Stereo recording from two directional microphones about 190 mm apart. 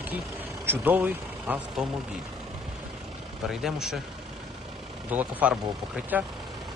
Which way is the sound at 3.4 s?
Centre (ahead or behind).